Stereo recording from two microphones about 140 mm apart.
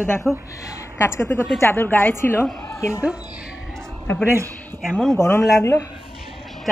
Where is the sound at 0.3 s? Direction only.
Centre (ahead or behind).